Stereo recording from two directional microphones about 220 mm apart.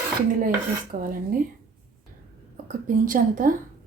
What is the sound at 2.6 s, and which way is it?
Speech, 40° right (ahead or behind).